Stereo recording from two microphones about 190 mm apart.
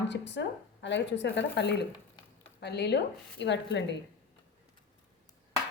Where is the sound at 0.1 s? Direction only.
65° left (ahead or behind).